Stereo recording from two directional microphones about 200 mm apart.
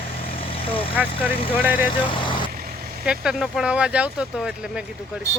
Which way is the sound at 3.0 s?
5° right (ahead or behind).